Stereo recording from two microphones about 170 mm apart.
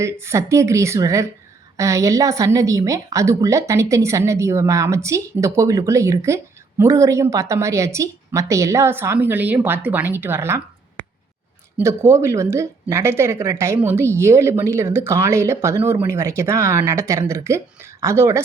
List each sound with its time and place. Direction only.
0.0 s a woman's voice: 15° right (ahead or behind)
11.8 s a woman's voice: 15° right (ahead or behind)